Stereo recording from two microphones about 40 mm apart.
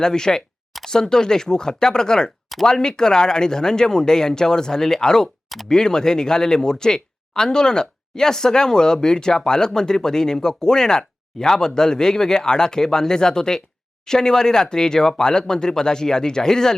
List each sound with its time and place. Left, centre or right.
0.0 s speech: centre